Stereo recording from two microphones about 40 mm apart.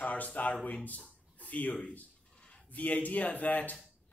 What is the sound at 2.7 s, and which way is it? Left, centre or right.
Speech, left.